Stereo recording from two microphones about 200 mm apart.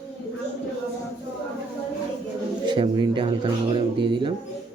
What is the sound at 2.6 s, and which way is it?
Speech, 25° right (ahead or behind).